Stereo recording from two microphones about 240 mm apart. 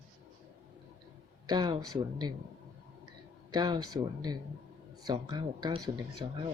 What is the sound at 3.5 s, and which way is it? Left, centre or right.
Speech, centre.